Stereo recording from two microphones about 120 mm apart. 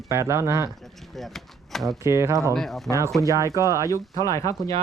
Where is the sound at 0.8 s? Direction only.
Centre (ahead or behind).